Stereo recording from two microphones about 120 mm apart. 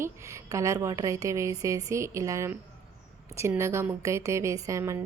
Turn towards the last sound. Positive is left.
turn(degrees=-25)  # may be behind; listen again after turning